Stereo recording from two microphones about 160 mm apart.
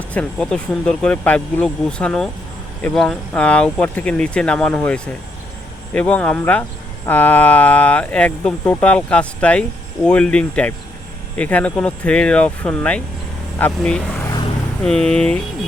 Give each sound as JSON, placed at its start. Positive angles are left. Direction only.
{"t": 0.1, "sound": "speech", "side_deg": 5}
{"t": 14.2, "sound": "vehicle", "side_deg": 20}
{"t": 14.8, "sound": "speech", "side_deg": 5}